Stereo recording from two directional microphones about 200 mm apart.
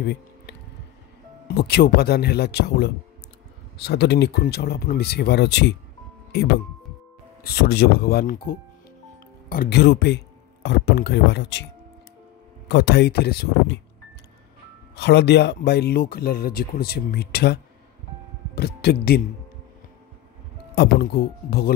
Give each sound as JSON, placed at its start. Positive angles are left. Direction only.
{"t": 0.0, "sound": "a sound", "side_deg": 55}
{"t": 1.5, "sound": "speech", "side_deg": 55}
{"t": 7.4, "sound": "speech", "side_deg": 50}
{"t": 12.6, "sound": "speech", "side_deg": 55}
{"t": 15.0, "sound": "speech", "side_deg": 60}
{"t": 20.7, "sound": "speech", "side_deg": 55}